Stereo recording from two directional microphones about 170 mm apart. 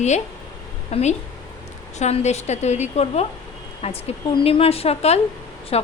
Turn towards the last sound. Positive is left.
turn(degrees=35)  # may be behind; listen again after turning